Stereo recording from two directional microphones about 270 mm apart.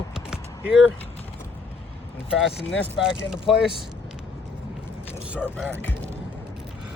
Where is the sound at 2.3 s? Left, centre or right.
Centre.